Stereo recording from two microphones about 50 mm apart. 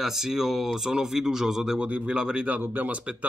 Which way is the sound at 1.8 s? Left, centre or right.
Right.